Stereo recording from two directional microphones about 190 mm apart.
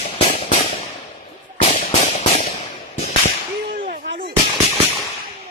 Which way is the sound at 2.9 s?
35° left (ahead or behind).